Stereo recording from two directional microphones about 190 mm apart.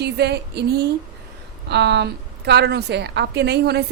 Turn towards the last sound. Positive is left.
turn(degrees=-60)  # may be behind; listen again after turning